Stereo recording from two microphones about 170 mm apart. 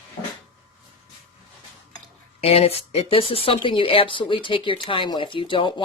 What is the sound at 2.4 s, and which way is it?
Speech, 35° left (ahead or behind).